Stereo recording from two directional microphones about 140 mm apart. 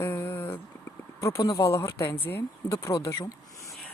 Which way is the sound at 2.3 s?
15° left (ahead or behind).